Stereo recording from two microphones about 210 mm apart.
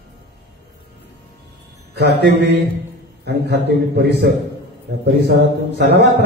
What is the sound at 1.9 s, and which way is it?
A man's voice, 55° right (ahead or behind).